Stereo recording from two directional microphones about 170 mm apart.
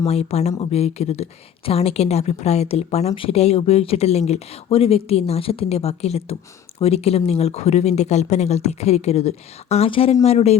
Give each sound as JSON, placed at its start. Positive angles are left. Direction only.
{"t": 0.0, "sound": "speech", "side_deg": 40}